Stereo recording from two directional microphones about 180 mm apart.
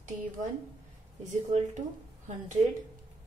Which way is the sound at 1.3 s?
40° right (ahead or behind).